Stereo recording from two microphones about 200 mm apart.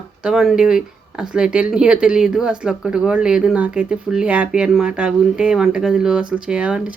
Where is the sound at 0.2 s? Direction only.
5° right (ahead or behind).